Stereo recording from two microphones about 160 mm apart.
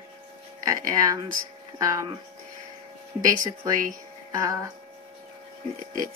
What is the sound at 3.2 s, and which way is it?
Speech, 20° right (ahead or behind).